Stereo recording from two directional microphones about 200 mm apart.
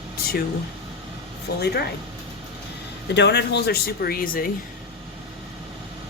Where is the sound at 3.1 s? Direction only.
60° left (ahead or behind).